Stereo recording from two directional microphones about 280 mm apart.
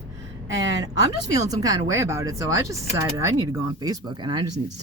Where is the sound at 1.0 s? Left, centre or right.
Centre.